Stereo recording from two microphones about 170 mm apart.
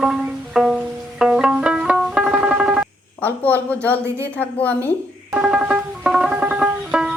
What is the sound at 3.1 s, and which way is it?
Speech, 10° left (ahead or behind).